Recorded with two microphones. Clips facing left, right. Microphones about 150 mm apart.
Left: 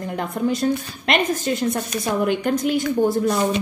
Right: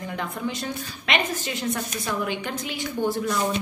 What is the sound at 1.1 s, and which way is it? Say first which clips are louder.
A woman's voice: left 6 dB; 45° left (ahead or behind).